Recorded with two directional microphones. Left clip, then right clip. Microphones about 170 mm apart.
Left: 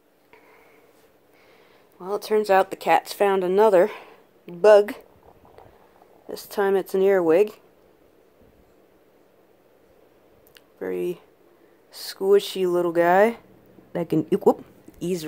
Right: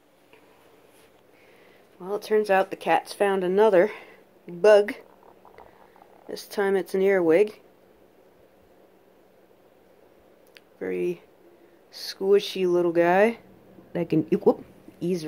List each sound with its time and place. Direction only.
2.0 s speech: 15° left (ahead or behind)
6.2 s speech: 10° left (ahead or behind)
10.8 s a woman's voice: 5° left (ahead or behind)